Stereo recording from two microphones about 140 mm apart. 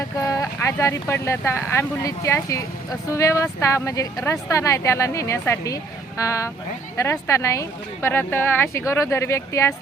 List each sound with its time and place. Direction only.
0.2 s speech: 25° left (ahead or behind)